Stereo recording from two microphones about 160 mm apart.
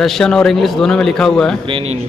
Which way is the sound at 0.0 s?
Centre (ahead or behind).